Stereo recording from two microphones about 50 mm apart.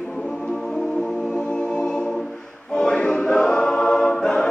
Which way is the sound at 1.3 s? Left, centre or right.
Centre.